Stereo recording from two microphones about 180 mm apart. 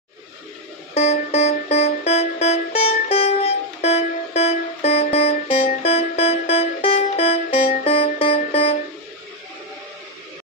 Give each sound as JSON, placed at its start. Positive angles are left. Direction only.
{"t": 0.9, "sound": "music", "side_deg": 35}